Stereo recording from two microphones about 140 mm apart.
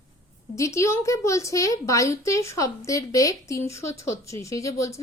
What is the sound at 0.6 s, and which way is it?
Speech, 20° left (ahead or behind).